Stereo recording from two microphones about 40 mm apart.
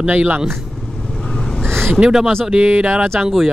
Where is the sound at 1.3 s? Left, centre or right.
Centre.